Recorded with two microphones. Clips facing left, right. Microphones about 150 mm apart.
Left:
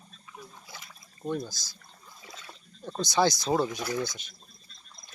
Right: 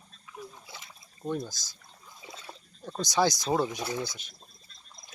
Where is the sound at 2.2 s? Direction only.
20° right (ahead or behind).